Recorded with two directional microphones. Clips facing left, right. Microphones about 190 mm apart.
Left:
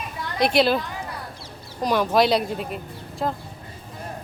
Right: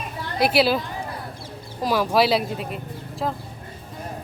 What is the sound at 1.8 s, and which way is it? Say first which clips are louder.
Speech: even; 5° right (ahead or behind).